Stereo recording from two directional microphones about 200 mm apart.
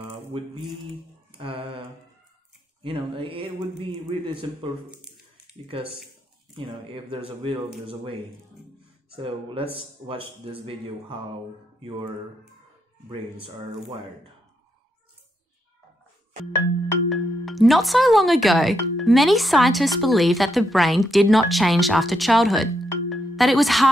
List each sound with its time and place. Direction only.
1.4 s speech: 25° right (ahead or behind)
4.9 s squish: 5° right (ahead or behind)
6.5 s speech: 25° right (ahead or behind)
17.1 s speech: centre (ahead or behind)